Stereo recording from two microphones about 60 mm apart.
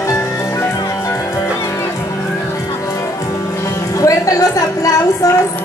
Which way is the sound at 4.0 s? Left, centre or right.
Left.